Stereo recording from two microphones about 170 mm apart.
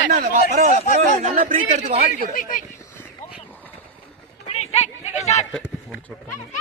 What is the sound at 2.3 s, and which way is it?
Speech, 55° left (ahead or behind).